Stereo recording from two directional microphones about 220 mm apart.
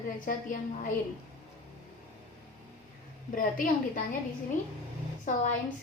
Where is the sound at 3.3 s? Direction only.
40° left (ahead or behind).